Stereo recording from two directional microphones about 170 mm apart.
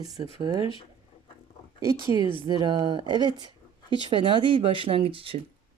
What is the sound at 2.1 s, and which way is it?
Speech, 25° right (ahead or behind).